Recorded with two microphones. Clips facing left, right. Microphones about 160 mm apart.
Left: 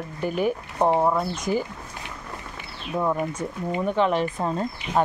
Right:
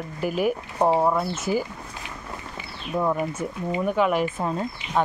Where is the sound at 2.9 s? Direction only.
Centre (ahead or behind).